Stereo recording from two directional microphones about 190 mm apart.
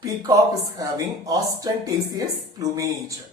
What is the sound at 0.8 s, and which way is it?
A woman's voice, 20° right (ahead or behind).